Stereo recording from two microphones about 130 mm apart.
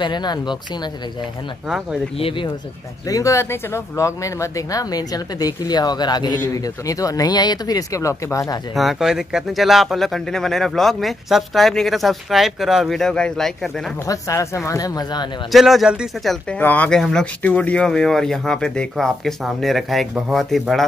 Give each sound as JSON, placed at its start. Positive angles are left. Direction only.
{"t": 0.0, "sound": "speech", "side_deg": 35}
{"t": 2.1, "sound": "speech", "side_deg": 40}
{"t": 3.1, "sound": "speech", "side_deg": 25}
{"t": 8.7, "sound": "speech", "side_deg": 0}
{"t": 14.0, "sound": "speech", "side_deg": 25}
{"t": 15.5, "sound": "speech", "side_deg": 0}
{"t": 16.4, "sound": "speech", "side_deg": 10}